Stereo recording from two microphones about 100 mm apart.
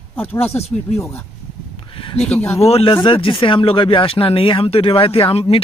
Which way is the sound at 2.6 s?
80° left.